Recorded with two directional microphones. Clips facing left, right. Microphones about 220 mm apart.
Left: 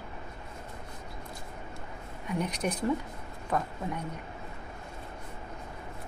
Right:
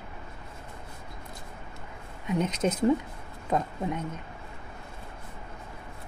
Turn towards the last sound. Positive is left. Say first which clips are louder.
# right 4 dB
turn(degrees=-20)  # may be behind; listen again after turning